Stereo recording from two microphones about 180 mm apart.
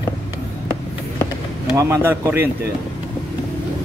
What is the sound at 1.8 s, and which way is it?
Speech, 15° right (ahead or behind).